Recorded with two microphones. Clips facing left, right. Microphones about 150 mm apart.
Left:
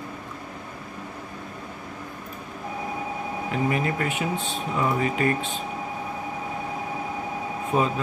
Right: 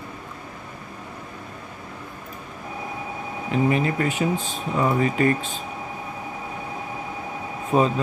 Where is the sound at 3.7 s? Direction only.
35° right (ahead or behind).